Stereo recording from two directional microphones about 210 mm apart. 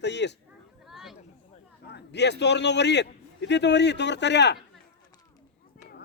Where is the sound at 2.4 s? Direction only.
55° left (ahead or behind).